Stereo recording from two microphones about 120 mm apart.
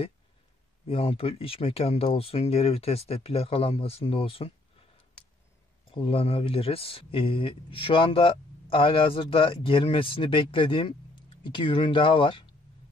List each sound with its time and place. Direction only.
0.8 s speech: 50° left (ahead or behind)